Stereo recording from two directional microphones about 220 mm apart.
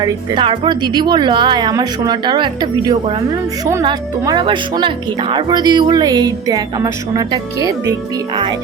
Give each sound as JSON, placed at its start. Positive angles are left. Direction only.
{"t": 0.0, "sound": "speech", "side_deg": -20}